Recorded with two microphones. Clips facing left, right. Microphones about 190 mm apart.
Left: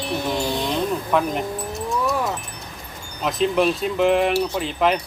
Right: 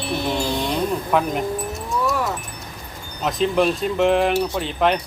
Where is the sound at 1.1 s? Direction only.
Centre (ahead or behind).